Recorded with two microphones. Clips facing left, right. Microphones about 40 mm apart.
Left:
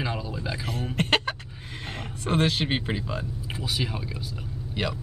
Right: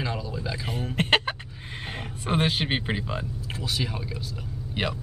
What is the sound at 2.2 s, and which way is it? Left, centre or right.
Speech, centre.